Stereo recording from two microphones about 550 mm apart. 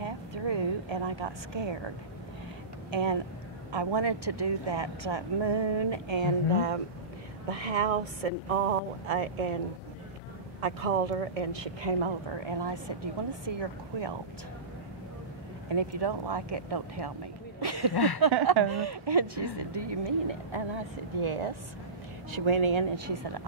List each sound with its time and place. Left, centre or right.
0.0 s a sound: right
2.9 s speech: right
7.4 s speech: right
10.6 s a woman's voice: right
15.7 s speech: right
17.9 s speech: left
18.2 s speech: right